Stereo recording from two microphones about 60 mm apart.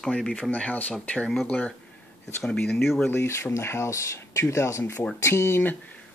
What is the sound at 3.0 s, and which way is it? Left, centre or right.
Speech, left.